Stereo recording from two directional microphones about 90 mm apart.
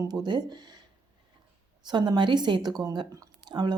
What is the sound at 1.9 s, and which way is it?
Speech, 55° right (ahead or behind).